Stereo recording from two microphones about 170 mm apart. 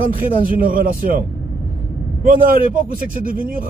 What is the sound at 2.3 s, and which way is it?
Speech, 55° right (ahead or behind).